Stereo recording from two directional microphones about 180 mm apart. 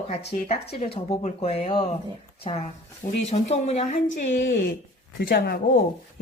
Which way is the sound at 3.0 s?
40° left (ahead or behind).